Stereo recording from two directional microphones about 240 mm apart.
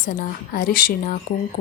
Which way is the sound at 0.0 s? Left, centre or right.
Left.